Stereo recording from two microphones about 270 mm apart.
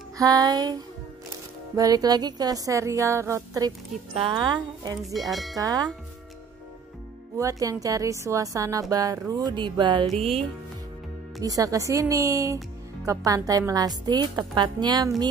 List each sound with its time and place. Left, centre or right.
0.2 s a woman's voice: centre
1.8 s a woman's voice: centre
5.3 s speech: centre
5.6 s a woman's voice: centre
7.3 s a woman's voice: centre
11.4 s a woman's voice: centre